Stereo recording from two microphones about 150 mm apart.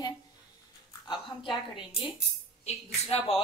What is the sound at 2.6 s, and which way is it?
Speech, 40° left (ahead or behind).